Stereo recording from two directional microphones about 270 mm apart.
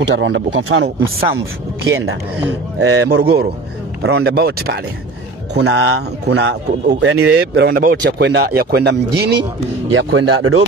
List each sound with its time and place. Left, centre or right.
0.1 s speech: right
2.8 s speech: right
4.0 s a man's voice: right